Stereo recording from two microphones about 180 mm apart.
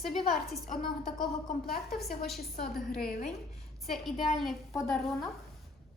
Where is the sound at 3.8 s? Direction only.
Centre (ahead or behind).